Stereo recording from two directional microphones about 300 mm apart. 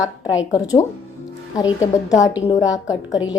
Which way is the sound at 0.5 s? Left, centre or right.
Centre.